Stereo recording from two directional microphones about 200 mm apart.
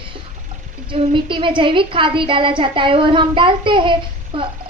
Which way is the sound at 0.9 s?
25° right (ahead or behind).